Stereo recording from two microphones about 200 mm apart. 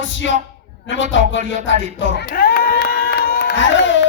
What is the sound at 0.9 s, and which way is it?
Music, 70° left (ahead or behind).